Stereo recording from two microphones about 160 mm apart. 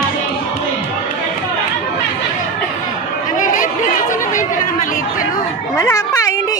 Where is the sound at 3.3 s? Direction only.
55° left (ahead or behind).